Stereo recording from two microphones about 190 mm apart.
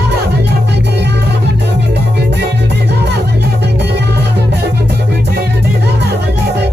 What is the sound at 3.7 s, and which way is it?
Music, 60° right (ahead or behind).